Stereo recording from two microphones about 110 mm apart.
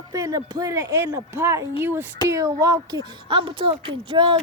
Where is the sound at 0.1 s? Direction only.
35° right (ahead or behind); by 2.0 s 20° right (ahead or behind).